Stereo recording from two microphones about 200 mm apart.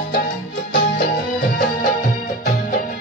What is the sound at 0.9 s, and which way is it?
Music, 40° left (ahead or behind).